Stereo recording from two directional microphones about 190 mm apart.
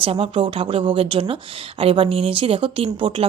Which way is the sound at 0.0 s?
30° right (ahead or behind).